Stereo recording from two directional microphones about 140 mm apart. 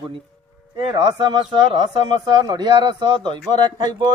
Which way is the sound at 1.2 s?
30° right (ahead or behind).